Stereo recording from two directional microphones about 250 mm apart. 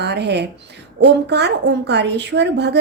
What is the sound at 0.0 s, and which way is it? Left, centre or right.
A woman's voice, right.